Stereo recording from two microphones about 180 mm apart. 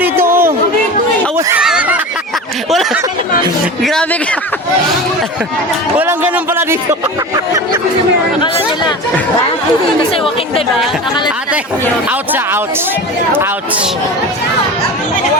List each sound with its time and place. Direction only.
0.0 s a sound: 10° right (ahead or behind)
1.4 s neigh: 15° right (ahead or behind)
1.6 s a sound: 5° right (ahead or behind)
3.8 s speech: 5° left (ahead or behind)
6.0 s speech: 10° right (ahead or behind)
7.3 s music: 20° right (ahead or behind)